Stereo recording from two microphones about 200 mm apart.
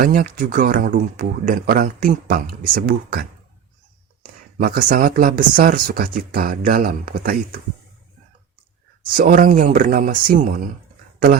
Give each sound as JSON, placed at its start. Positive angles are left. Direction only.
{"t": 0.0, "sound": "speech", "side_deg": -45}
{"t": 4.5, "sound": "speech", "side_deg": -45}
{"t": 9.1, "sound": "speech", "side_deg": -45}